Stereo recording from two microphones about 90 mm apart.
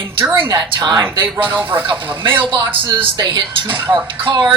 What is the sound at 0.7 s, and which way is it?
Speech, 55° right (ahead or behind).